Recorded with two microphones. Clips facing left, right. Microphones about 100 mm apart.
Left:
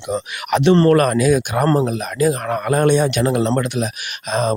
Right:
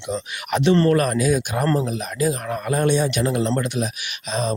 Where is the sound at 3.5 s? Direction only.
65° left (ahead or behind).